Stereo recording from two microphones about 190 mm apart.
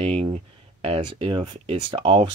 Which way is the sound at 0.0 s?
30° right (ahead or behind).